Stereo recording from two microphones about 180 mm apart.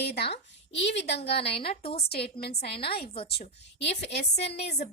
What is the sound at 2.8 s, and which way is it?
Speech, 30° left (ahead or behind).